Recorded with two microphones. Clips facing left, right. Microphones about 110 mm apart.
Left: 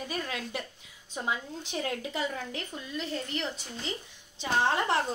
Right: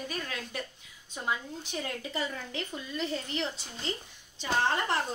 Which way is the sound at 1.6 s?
15° left (ahead or behind).